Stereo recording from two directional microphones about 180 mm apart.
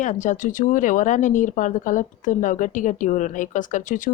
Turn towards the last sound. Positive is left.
turn(degrees=45)  # may be behind; listen again after turning